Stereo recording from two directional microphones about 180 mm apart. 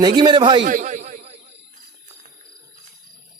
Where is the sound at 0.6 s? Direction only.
45° right (ahead or behind).